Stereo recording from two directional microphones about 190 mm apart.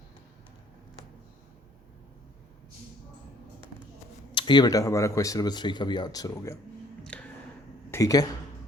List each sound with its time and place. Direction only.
4.4 s speech: 25° left (ahead or behind)
7.0 s a sound: 5° left (ahead or behind)
7.9 s speech: 15° left (ahead or behind)